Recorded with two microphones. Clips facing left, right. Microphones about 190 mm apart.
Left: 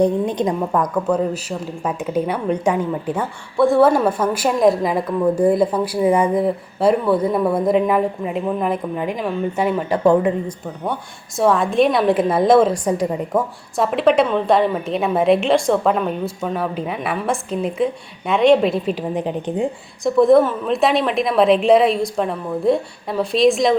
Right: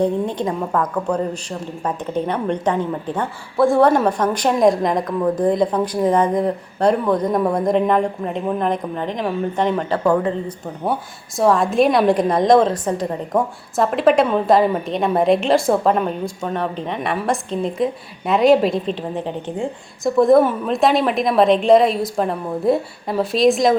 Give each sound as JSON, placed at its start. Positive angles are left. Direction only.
{"t": 0.0, "sound": "a woman's voice", "side_deg": 15}
{"t": 1.0, "sound": "a woman's voice", "side_deg": 5}
{"t": 10.0, "sound": "speech", "side_deg": 20}
{"t": 11.3, "sound": "a woman's voice", "side_deg": 0}
{"t": 13.7, "sound": "a woman's voice", "side_deg": 0}
{"t": 20.1, "sound": "a woman's voice", "side_deg": 0}